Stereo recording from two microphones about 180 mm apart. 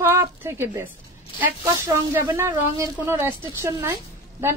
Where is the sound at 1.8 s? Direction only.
15° right (ahead or behind).